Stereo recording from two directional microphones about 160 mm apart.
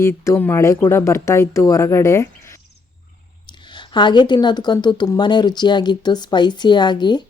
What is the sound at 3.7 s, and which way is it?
Speech, 30° left (ahead or behind).